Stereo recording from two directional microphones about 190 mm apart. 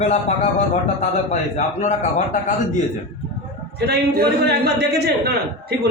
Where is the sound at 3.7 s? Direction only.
60° right (ahead or behind).